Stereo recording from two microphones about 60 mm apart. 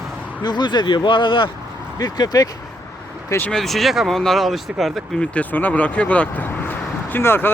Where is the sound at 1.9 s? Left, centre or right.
Left.